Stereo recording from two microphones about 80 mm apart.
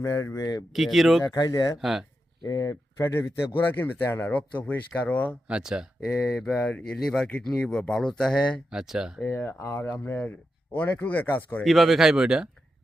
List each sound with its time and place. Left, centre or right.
0.0 s speech: left
0.7 s speech: centre
1.2 s speech: left
1.8 s speech: centre
2.4 s speech: left
5.5 s speech: centre
6.1 s speech: centre
8.7 s speech: centre
9.2 s speech: left
11.6 s speech: centre